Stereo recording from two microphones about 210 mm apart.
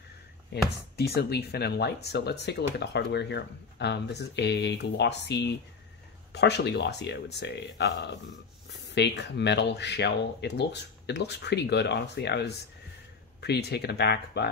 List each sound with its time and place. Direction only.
0.5 s speech: 50° left (ahead or behind)